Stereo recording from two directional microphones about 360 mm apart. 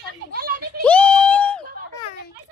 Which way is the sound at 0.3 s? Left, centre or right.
Right.